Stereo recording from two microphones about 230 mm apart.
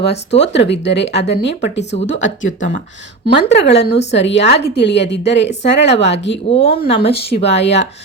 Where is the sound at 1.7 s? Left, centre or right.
Left.